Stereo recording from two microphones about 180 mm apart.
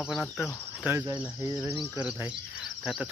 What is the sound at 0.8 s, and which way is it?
Speech, 10° right (ahead or behind).